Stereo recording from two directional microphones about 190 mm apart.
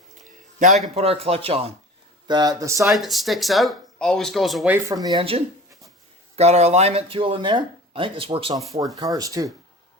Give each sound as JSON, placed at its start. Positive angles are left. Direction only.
{"t": 0.9, "sound": "speech", "side_deg": -30}
{"t": 2.8, "sound": "speech", "side_deg": 0}